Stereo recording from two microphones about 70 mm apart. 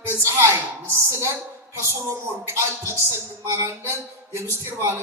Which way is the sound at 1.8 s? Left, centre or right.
Right.